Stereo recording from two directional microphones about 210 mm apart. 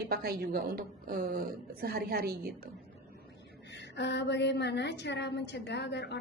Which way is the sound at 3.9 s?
55° left (ahead or behind).